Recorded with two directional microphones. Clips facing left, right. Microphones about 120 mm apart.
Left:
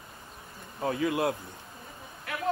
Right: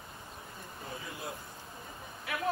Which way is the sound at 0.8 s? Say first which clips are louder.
Left 16 dB; 75° left (ahead or behind).